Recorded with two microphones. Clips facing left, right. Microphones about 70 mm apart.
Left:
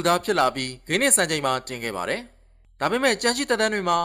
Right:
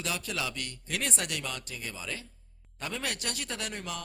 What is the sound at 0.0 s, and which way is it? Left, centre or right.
Speech, left.